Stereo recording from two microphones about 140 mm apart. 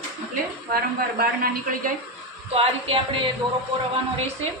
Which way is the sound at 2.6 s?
40° right (ahead or behind).